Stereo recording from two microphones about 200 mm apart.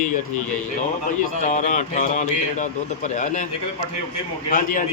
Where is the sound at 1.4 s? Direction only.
35° left (ahead or behind).